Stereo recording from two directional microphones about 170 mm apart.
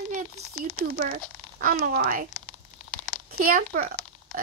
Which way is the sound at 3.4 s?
60° right (ahead or behind).